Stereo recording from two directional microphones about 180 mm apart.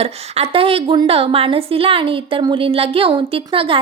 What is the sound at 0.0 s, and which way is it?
A woman's voice, 35° right (ahead or behind).